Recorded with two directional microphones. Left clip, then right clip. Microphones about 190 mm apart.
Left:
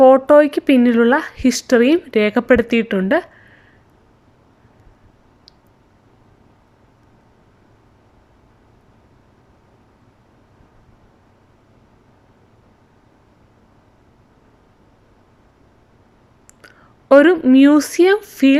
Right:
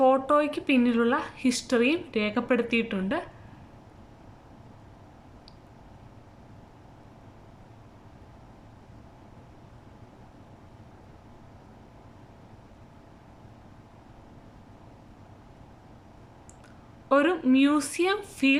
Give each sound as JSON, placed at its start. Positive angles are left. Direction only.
{"t": 0.0, "sound": "speech", "side_deg": 35}
{"t": 16.6, "sound": "a woman's voice", "side_deg": 35}